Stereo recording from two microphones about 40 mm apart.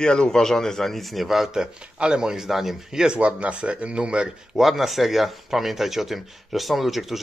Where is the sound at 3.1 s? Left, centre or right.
Right.